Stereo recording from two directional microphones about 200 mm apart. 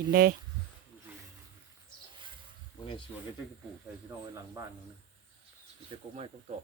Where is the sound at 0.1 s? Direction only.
50° right (ahead or behind).